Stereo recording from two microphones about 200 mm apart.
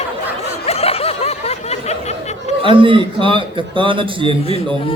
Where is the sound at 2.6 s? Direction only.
25° right (ahead or behind).